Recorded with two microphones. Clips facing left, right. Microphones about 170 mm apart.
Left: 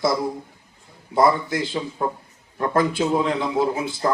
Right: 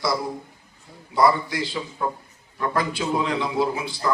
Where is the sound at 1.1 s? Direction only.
50° left (ahead or behind).